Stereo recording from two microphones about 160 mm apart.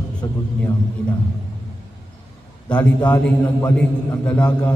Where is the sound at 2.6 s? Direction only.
10° left (ahead or behind).